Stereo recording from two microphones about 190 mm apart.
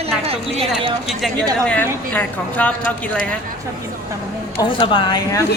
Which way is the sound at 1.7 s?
10° left (ahead or behind).